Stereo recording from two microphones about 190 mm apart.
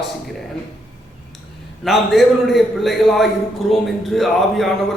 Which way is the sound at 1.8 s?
Centre (ahead or behind).